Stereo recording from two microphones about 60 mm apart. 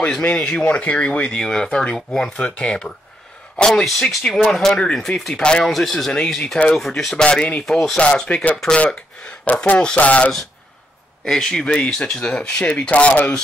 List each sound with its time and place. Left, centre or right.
0.4 s speech: centre
5.7 s speech: centre
7.2 s speech: centre
7.6 s speech: centre
8.0 s speech: centre
11.2 s speech: centre; by 13.3 s left